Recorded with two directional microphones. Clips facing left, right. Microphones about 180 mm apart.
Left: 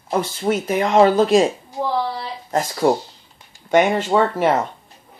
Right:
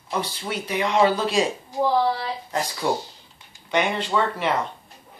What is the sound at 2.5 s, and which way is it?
Speech, 45° left (ahead or behind).